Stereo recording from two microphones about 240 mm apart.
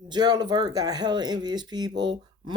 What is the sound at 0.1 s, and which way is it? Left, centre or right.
Speech, centre.